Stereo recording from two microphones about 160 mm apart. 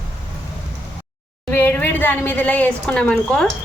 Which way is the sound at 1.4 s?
15° left (ahead or behind).